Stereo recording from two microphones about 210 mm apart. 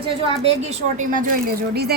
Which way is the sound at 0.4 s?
35° right (ahead or behind).